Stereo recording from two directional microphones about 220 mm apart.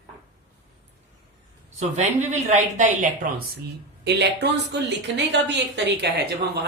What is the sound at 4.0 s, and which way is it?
Speech, 50° right (ahead or behind).